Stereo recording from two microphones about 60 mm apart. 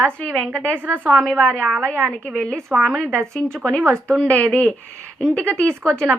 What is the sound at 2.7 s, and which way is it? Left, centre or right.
Speech, right.